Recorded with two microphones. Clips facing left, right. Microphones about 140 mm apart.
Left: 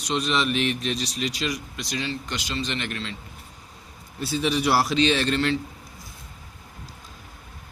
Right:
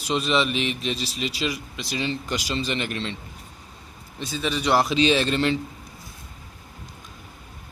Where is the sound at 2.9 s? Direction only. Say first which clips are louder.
Right 3 dB; 25° right (ahead or behind).